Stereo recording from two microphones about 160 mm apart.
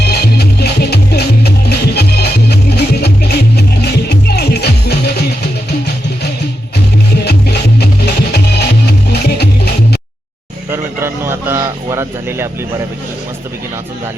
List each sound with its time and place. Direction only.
0.0 s music: 85° left
7.3 s music: 90° left
10.7 s a sound: 15° right (ahead or behind)